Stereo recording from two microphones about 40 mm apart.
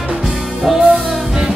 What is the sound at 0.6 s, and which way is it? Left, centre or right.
Music, centre.